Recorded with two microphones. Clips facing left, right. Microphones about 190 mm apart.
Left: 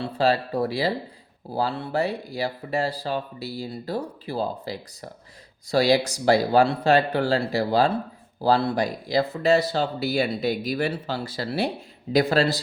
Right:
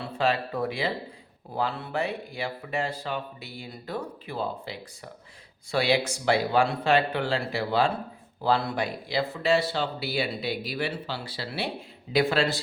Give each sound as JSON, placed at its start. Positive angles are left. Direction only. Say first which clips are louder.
{"t": 0.0, "sound": "speech", "louder": "left 4 dB", "side_deg": 35}